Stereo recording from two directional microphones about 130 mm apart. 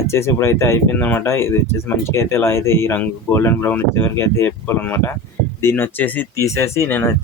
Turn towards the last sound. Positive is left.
turn(degrees=15)  # may be behind; listen again after turning